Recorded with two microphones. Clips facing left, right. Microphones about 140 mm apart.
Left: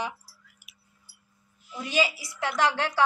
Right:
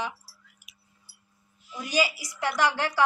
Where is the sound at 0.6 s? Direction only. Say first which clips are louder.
Even; 5° left (ahead or behind).